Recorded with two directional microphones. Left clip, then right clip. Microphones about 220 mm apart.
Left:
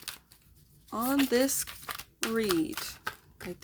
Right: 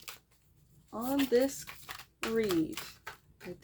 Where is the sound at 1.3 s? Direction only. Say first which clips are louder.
Left 1 dB; 25° left (ahead or behind).